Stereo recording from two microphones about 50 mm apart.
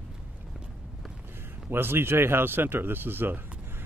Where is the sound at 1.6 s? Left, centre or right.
Right.